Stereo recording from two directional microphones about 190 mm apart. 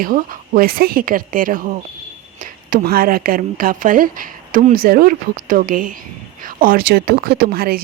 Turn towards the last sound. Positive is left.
turn(degrees=-50)  # may be behind; listen again after turning